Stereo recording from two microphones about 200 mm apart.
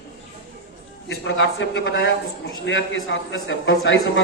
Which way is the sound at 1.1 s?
70° left (ahead or behind).